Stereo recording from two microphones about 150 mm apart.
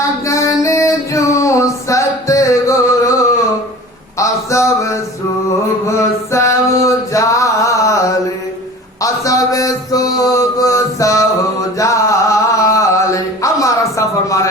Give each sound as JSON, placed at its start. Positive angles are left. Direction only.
{"t": 0.3, "sound": "music", "side_deg": 20}
{"t": 4.2, "sound": "a sound", "side_deg": 20}
{"t": 9.0, "sound": "mantra", "side_deg": 20}
{"t": 11.8, "sound": "chant", "side_deg": 20}